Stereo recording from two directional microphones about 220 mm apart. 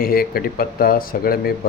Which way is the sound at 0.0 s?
40° left (ahead or behind).